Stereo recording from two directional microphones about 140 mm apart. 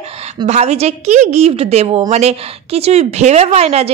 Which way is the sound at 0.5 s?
50° right (ahead or behind).